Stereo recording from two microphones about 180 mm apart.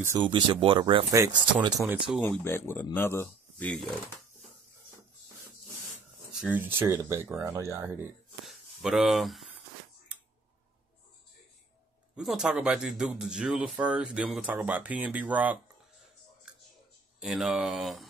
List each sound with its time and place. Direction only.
0.2 s speech: 25° right (ahead or behind)
1.1 s speech: 15° right (ahead or behind)
2.2 s speech: 10° left (ahead or behind)
6.3 s speech: 10° right (ahead or behind)
8.5 s speech: centre (ahead or behind)
12.2 s speech: centre (ahead or behind)
17.2 s speech: centre (ahead or behind)